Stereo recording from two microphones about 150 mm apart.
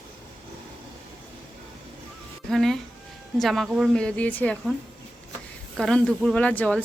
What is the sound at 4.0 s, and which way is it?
Speech, 10° left (ahead or behind).